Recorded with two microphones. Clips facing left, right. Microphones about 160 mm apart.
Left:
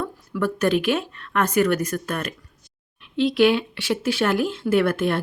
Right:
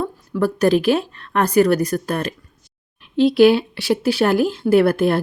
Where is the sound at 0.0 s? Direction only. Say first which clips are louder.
Right 4 dB; 35° right (ahead or behind).